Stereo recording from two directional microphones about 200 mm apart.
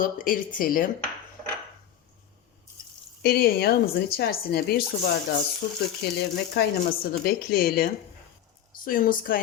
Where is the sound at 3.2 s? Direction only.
50° left (ahead or behind).